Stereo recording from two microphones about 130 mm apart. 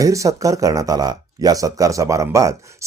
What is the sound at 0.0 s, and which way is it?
Speech, 25° right (ahead or behind).